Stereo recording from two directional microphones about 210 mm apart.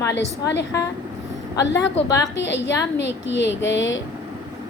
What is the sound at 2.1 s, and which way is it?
Speech, 15° left (ahead or behind).